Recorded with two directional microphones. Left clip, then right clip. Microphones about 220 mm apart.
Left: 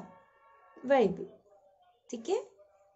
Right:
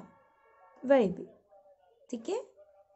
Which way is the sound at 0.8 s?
20° right (ahead or behind).